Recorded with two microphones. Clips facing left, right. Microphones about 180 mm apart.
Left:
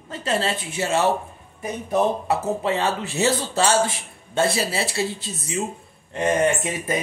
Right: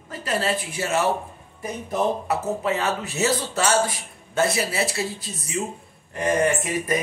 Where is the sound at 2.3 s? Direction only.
30° left (ahead or behind).